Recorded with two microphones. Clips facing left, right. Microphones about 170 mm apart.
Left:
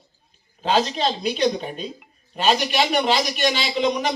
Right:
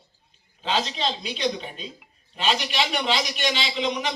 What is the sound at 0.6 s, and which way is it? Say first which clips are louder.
Speech: left 5 dB; 50° left (ahead or behind).